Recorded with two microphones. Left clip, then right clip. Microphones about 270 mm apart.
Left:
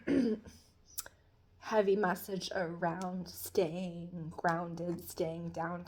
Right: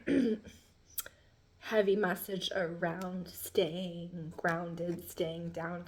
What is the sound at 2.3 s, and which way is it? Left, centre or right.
Speech, left.